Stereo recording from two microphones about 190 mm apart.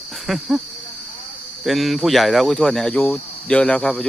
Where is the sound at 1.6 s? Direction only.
Centre (ahead or behind).